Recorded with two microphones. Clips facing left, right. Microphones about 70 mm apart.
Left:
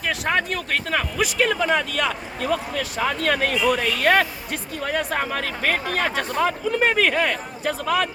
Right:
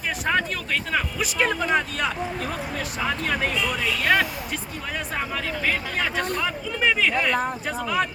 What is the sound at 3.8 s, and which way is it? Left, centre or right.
Speech, left.